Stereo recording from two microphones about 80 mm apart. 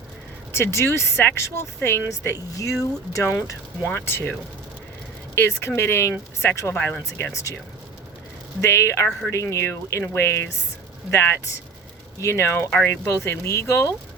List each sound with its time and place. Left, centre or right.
0.5 s speech: left
8.6 s speech: left